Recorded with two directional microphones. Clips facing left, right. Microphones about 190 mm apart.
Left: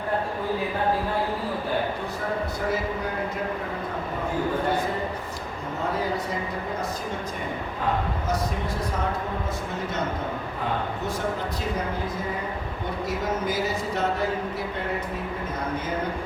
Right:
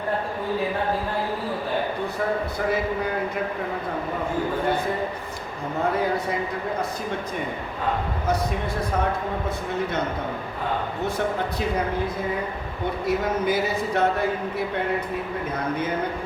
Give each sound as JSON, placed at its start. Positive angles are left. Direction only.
{"t": 13.1, "sound": "speech", "side_deg": -60}